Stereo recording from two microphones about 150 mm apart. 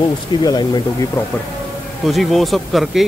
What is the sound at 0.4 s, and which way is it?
Speech, 25° left (ahead or behind).